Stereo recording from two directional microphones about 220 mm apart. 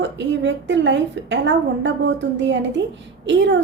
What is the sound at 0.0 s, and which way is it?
A woman's voice, 55° right (ahead or behind).